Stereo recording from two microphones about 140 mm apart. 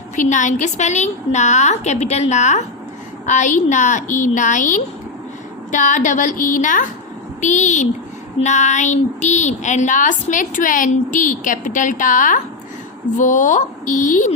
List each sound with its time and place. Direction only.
0.2 s a woman's voice: 65° left (ahead or behind)